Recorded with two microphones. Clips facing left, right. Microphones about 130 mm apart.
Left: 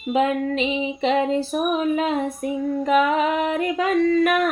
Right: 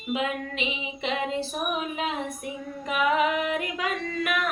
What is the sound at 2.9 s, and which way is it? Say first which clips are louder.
Female singing: left 4 dB; 35° left (ahead or behind).